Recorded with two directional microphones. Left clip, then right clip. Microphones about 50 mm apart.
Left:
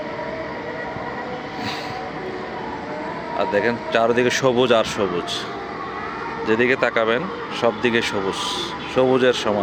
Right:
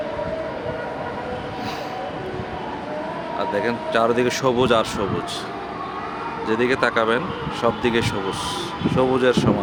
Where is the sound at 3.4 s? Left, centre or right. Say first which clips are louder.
Left 3 dB; centre.